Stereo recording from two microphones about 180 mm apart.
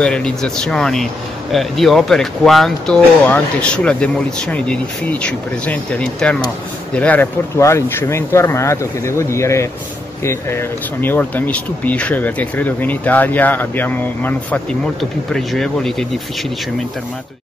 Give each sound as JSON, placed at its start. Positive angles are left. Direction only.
{"t": 0.0, "sound": "speech", "side_deg": 5}